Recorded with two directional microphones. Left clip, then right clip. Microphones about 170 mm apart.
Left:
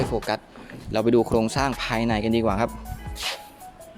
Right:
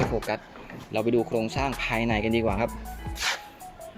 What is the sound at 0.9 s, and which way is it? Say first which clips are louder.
Speech: left 5 dB; 35° left (ahead or behind).